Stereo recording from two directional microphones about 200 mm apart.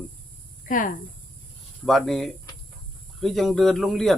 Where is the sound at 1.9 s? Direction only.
Centre (ahead or behind).